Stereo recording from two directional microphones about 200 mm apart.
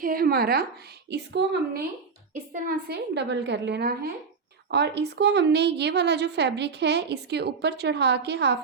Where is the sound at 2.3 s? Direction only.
45° right (ahead or behind).